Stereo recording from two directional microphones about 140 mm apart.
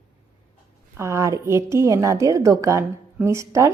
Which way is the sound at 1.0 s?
20° right (ahead or behind).